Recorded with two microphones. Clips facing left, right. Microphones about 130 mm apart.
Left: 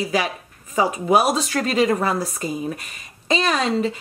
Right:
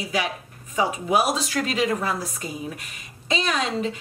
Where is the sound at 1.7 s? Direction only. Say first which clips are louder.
Left 6 dB; 45° left (ahead or behind).